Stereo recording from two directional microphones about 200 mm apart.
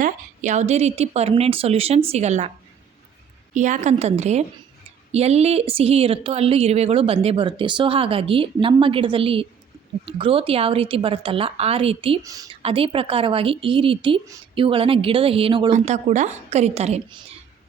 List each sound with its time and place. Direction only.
0.0 s a woman's voice: 35° right (ahead or behind)
3.5 s a woman's voice: 35° right (ahead or behind)